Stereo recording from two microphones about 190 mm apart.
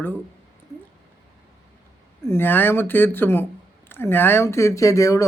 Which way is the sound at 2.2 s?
10° left (ahead or behind).